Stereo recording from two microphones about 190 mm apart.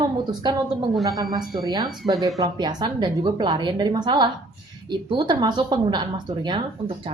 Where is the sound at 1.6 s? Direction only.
20° right (ahead or behind).